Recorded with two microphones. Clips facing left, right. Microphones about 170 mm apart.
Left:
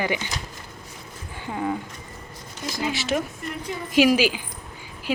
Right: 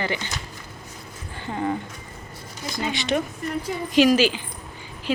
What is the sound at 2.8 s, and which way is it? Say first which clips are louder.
Speech: right 1 dB; 5° left (ahead or behind).